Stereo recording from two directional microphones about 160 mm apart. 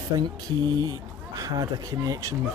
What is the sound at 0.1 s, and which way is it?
Speech, 25° right (ahead or behind).